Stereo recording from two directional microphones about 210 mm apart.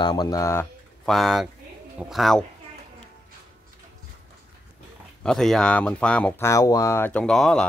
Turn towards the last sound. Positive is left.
turn(degrees=5)  # may be behind; listen again after turning